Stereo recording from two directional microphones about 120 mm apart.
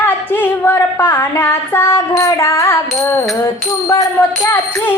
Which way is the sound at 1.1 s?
20° left (ahead or behind).